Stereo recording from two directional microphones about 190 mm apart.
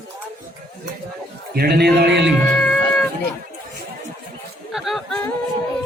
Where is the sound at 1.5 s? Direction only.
55° right (ahead or behind).